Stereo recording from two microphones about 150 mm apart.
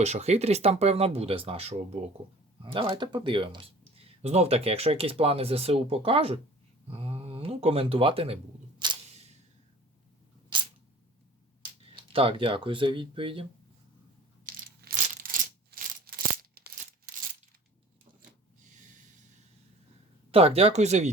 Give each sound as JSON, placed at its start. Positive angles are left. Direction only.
{"t": 0.0, "sound": "speech", "side_deg": -50}
{"t": 10.5, "sound": "camera", "side_deg": -30}
{"t": 12.0, "sound": "speech", "side_deg": -40}
{"t": 14.4, "sound": "crushing", "side_deg": -70}
{"t": 20.3, "sound": "speech", "side_deg": -40}